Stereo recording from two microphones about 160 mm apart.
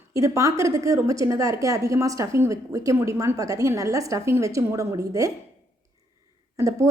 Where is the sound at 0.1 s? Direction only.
20° right (ahead or behind).